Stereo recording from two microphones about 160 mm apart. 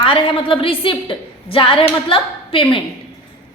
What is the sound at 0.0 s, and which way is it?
A woman's voice, 35° left (ahead or behind).